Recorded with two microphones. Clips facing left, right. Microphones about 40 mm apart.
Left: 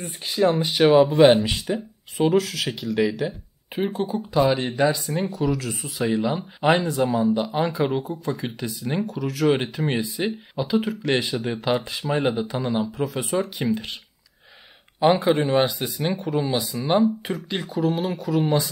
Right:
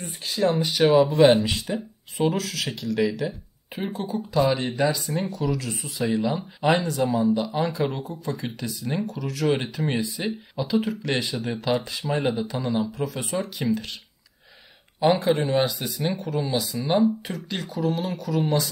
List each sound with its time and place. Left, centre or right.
0.0 s speech: centre
12.0 s speech: centre
13.6 s speech: centre
15.1 s speech: centre
15.6 s speech: centre